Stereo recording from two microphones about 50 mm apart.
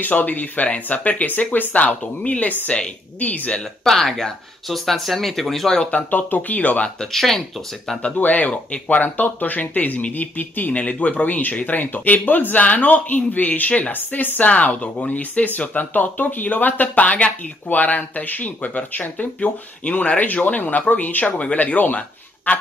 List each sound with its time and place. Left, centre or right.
0.0 s speech: left
3.5 s speech: centre
5.7 s speech: centre
5.9 s speech: left
7.0 s speech: centre
8.2 s a man's voice: left